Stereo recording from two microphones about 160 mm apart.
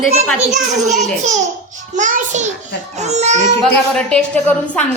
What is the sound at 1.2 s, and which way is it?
A child's voice, 50° right (ahead or behind).